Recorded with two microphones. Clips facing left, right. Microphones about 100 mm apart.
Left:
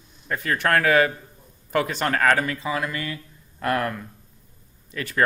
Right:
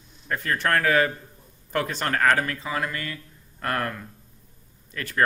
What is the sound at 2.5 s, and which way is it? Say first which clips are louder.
Speech: left 2 dB; 10° left (ahead or behind).